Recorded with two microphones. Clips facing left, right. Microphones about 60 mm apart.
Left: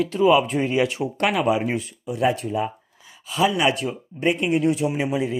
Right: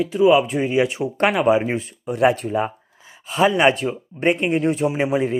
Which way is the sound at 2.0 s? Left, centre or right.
Right.